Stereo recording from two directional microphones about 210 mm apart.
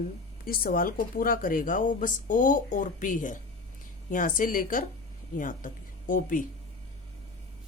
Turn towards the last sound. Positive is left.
turn(degrees=40)  # may be behind; listen again after turning